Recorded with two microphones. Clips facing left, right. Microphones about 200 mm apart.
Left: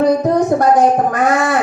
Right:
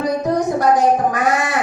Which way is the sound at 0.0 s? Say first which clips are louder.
Left 5 dB; 55° left (ahead or behind).